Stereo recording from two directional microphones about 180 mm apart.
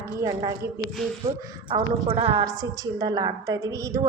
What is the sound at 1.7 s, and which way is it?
A woman's voice, 30° right (ahead or behind).